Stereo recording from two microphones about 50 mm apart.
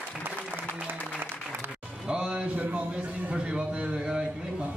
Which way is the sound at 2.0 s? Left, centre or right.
Centre.